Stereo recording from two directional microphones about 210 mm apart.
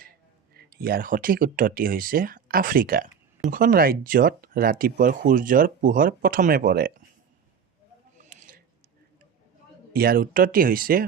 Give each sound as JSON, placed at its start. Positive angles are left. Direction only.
{"t": 0.5, "sound": "speech", "side_deg": -45}
{"t": 8.2, "sound": "a sound", "side_deg": -40}
{"t": 9.9, "sound": "speech", "side_deg": -45}